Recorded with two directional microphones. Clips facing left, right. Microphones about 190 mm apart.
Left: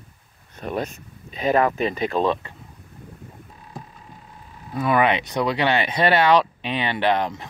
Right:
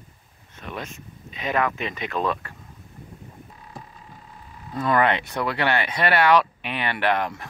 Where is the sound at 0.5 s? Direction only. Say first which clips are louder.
Left 7 dB; 40° left (ahead or behind).